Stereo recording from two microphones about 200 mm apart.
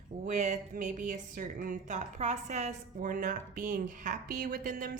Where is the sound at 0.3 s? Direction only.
35° right (ahead or behind).